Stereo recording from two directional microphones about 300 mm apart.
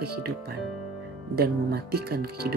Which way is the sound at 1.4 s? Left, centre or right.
Right.